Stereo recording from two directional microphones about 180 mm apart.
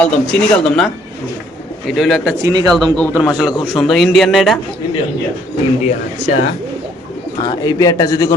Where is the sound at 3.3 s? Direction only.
5° right (ahead or behind).